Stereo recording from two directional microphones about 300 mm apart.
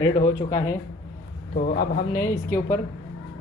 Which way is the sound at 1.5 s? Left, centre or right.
Left.